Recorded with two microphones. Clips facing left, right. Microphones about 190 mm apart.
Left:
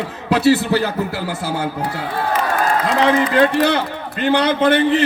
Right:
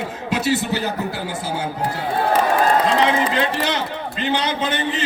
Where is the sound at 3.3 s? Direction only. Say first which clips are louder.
Left 7 dB; 55° left (ahead or behind).